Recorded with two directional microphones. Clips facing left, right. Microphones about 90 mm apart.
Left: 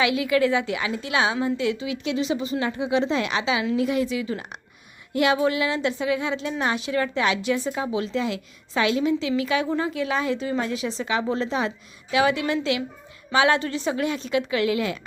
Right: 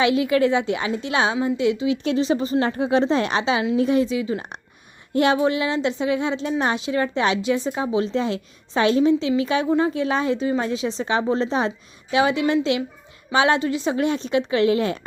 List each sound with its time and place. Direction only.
0.0 s a woman's voice: 30° right (ahead or behind)
2.0 s a woman's voice: 40° right (ahead or behind); by 13.9 s 20° right (ahead or behind)
13.9 s a woman's voice: 30° right (ahead or behind)